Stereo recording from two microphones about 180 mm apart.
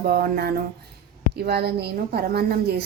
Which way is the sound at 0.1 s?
60° right (ahead or behind).